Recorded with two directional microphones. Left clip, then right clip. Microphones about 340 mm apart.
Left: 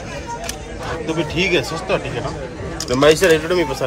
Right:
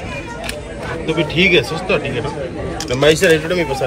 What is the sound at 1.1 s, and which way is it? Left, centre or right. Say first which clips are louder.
Speech: right 6 dB; centre.